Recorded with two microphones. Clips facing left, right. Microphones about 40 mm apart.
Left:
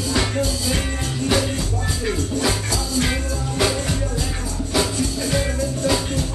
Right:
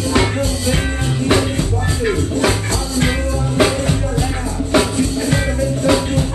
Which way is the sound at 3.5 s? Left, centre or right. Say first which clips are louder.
Right 6 dB; right.